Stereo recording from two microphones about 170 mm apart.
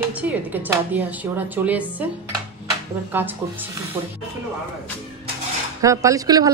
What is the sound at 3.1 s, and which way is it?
Speech, 10° right (ahead or behind).